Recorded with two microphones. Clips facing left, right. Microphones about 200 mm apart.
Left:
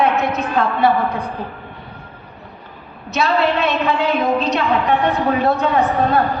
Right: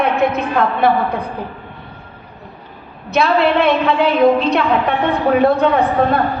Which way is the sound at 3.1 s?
55° right (ahead or behind).